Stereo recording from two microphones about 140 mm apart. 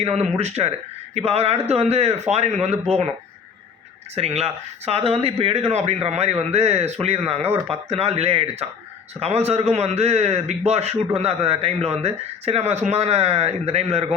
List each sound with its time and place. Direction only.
0.0 s a man's voice: 50° right (ahead or behind)
4.1 s a man's voice: 50° right (ahead or behind)